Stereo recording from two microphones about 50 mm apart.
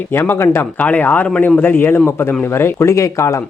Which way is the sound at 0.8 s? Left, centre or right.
Left.